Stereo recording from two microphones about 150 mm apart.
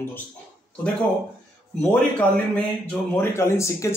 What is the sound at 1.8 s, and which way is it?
A man's voice, 10° left (ahead or behind).